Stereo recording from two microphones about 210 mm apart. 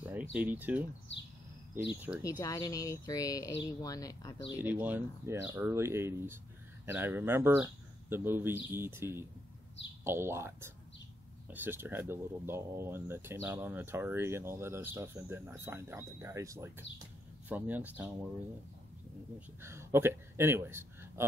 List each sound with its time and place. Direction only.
0.0 s speech: 10° right (ahead or behind)
2.0 s speech: 10° right (ahead or behind)
2.2 s speech: 15° left (ahead or behind)
4.6 s speech: 10° right (ahead or behind)
19.6 s speech: 10° right (ahead or behind)